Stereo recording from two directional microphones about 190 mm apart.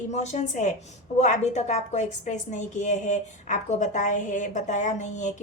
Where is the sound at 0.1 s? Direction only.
35° left (ahead or behind).